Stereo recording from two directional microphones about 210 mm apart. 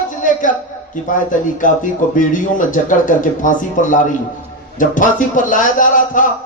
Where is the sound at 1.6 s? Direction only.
40° left (ahead or behind).